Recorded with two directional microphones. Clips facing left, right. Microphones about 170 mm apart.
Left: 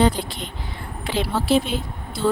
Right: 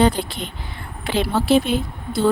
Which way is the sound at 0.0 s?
60° right (ahead or behind).